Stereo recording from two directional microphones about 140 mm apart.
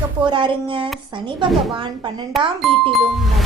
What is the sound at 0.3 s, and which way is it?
A woman's voice, 35° right (ahead or behind).